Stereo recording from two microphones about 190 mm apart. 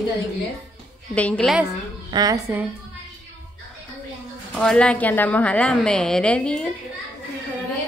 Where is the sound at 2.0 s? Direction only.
20° right (ahead or behind).